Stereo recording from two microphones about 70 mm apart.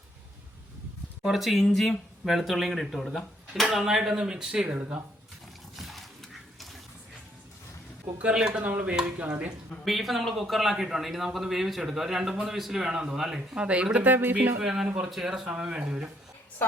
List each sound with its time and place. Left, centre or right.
1.2 s speech: centre
5.7 s dog: centre
8.2 s a man's voice: centre
9.8 s a man's voice: centre; by 14.3 s right
14.6 s a man's voice: centre